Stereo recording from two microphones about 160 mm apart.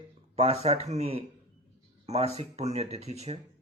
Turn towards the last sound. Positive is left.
turn(degrees=-40)  # may be behind; listen again after turning